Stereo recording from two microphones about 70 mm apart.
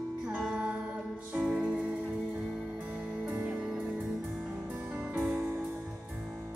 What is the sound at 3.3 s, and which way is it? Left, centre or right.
Music, right.